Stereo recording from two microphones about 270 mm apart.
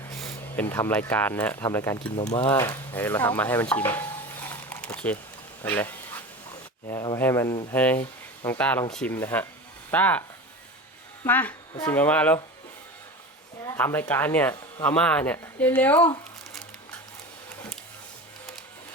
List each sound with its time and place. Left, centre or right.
0.2 s speech: centre
2.1 s speech: centre
3.9 s a sound: centre
6.9 s speech: centre
11.3 s speech: centre
13.7 s speech: centre